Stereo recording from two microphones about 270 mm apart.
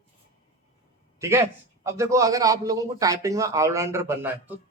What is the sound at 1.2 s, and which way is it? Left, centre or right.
A man's voice, centre.